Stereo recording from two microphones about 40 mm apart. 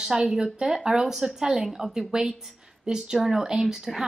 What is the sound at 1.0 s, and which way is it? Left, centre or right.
Speech, centre.